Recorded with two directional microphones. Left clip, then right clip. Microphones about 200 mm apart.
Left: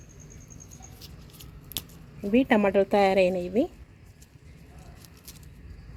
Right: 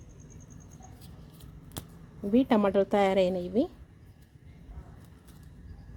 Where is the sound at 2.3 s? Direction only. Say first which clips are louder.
Left 3 dB; centre (ahead or behind).